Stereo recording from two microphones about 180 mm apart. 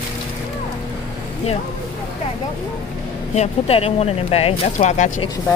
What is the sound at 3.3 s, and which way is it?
Speech, 35° left (ahead or behind).